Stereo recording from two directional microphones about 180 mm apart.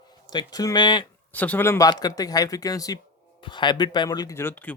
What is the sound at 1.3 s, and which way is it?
A man's voice, 10° left (ahead or behind).